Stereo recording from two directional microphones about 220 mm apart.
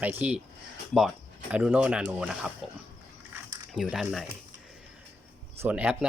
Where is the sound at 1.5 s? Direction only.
5° right (ahead or behind).